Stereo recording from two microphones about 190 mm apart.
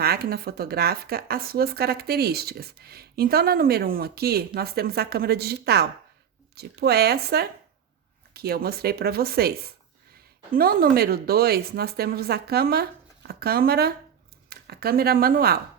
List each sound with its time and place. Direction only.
0.0 s speech: 55° right (ahead or behind)